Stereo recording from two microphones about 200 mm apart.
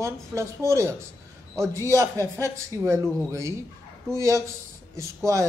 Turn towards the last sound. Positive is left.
turn(degrees=-15)  # may be behind; listen again after turning